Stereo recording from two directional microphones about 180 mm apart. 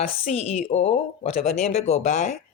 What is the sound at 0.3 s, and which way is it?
Speech, 40° left (ahead or behind).